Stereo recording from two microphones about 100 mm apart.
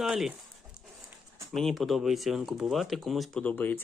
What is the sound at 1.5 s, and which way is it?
Speech, 5° left (ahead or behind).